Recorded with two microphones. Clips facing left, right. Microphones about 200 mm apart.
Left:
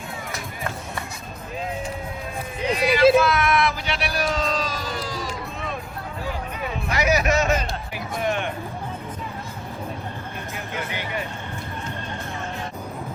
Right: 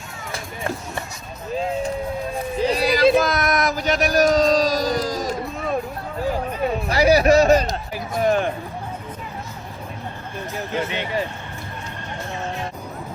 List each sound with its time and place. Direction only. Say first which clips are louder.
0.3 s music: right 5 dB; 30° right (ahead or behind)
2.6 s a sound: right 1 dB; 35° right (ahead or behind)
10.7 s speech: right 6 dB; 25° right (ahead or behind)